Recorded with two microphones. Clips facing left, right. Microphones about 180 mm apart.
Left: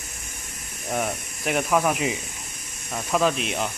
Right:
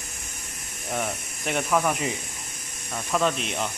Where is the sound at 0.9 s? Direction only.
10° left (ahead or behind).